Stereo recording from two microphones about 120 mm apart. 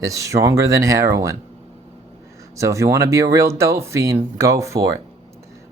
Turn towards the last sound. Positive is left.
turn(degrees=-25)  # may be behind; listen again after turning